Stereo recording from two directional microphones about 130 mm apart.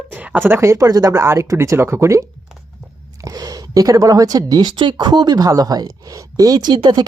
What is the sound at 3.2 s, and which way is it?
Speech, 30° right (ahead or behind).